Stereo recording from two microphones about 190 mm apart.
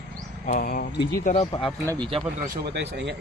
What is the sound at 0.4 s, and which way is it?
Speech, 45° left (ahead or behind).